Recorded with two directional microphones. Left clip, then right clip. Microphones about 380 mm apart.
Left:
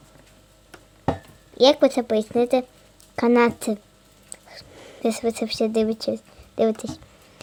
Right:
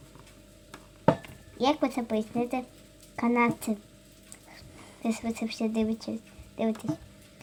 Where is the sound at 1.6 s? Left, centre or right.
Left.